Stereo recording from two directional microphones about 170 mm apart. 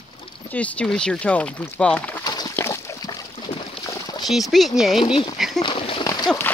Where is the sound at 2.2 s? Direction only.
25° left (ahead or behind).